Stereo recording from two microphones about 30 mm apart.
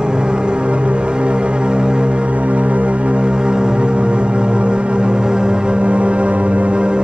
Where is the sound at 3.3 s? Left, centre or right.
Right.